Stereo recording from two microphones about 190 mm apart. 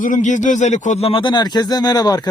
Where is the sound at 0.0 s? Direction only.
40° left (ahead or behind).